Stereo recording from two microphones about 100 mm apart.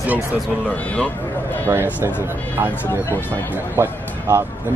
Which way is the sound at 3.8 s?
25° right (ahead or behind).